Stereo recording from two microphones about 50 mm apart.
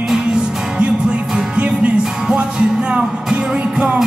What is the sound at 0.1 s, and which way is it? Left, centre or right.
Music, centre.